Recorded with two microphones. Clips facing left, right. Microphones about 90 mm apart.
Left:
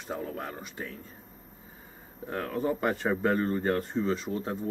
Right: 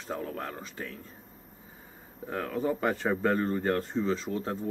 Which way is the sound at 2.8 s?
10° left (ahead or behind).